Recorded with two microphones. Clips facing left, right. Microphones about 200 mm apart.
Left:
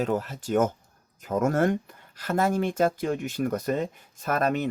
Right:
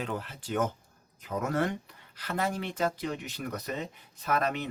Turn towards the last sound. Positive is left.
turn(degrees=45)  # may be behind; listen again after turning